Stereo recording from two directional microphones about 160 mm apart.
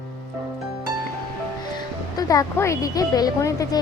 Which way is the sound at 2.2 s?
20° left (ahead or behind).